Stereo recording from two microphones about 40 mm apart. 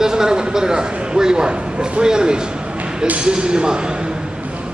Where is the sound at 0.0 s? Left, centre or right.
Centre.